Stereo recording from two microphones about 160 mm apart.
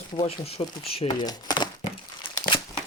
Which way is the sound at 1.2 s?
25° left (ahead or behind).